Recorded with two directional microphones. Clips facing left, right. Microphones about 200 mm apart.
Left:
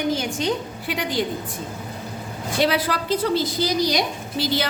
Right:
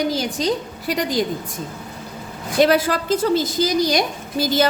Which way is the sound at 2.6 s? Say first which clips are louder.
Right 5 dB; 45° right (ahead or behind).